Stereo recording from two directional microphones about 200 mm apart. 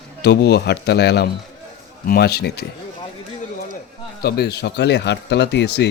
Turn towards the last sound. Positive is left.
turn(degrees=60)  # may be behind; listen again after turning